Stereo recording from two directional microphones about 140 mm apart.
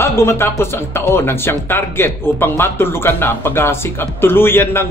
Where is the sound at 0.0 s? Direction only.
20° left (ahead or behind).